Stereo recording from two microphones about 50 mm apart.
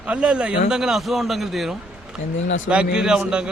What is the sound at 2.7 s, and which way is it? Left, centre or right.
Speech, centre.